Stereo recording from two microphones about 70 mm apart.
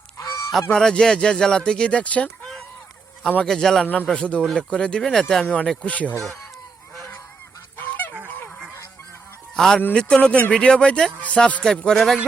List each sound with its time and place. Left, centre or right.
0.2 s goose: left
0.7 s speech: centre
5.8 s speech: centre
7.8 s goose: left
9.6 s speech: centre
11.8 s speech: centre